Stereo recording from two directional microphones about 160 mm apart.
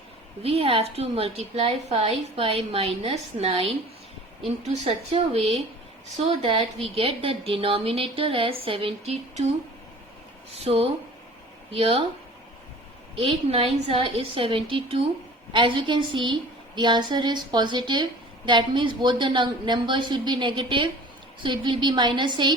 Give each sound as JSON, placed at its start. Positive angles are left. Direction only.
{"t": 0.4, "sound": "a woman's voice", "side_deg": -35}
{"t": 10.5, "sound": "a woman's voice", "side_deg": -40}
{"t": 13.1, "sound": "a woman's voice", "side_deg": -35}